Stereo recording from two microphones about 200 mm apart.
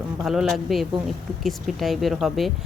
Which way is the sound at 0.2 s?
Centre (ahead or behind).